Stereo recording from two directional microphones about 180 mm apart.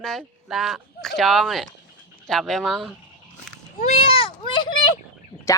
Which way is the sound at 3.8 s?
35° left (ahead or behind).